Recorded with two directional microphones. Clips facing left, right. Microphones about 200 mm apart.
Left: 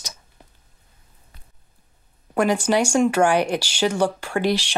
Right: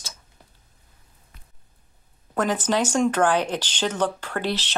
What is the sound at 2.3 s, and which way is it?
Speech, 10° left (ahead or behind).